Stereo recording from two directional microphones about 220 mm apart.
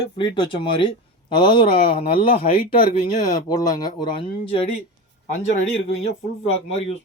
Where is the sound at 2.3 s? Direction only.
35° left (ahead or behind).